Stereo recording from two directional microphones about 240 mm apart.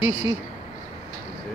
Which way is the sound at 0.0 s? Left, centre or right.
Left.